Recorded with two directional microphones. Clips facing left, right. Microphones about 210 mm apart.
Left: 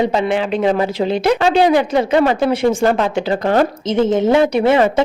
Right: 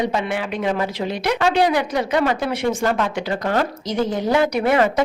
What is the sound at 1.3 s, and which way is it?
A woman's voice, 25° left (ahead or behind).